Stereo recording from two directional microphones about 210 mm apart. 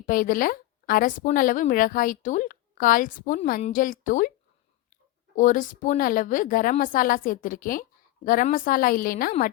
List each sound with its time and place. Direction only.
0.0 s a woman's voice: 40° left (ahead or behind)
5.4 s a woman's voice: 40° left (ahead or behind)